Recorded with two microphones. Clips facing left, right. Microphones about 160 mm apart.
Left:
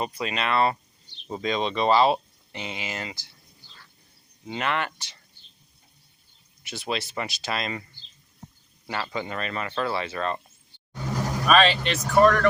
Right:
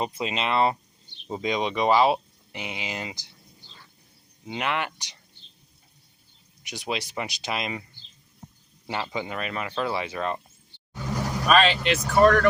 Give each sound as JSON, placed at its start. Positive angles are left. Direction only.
{"t": 0.0, "sound": "speech", "side_deg": -20}
{"t": 4.4, "sound": "speech", "side_deg": -10}
{"t": 6.6, "sound": "speech", "side_deg": -15}
{"t": 8.9, "sound": "speech", "side_deg": -15}
{"t": 11.4, "sound": "speech", "side_deg": 0}